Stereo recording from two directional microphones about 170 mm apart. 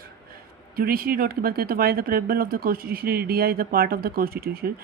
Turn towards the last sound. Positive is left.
turn(degrees=-65)  # may be behind; listen again after turning